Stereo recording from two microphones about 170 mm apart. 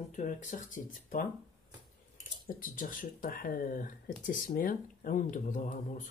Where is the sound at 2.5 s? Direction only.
55° left (ahead or behind).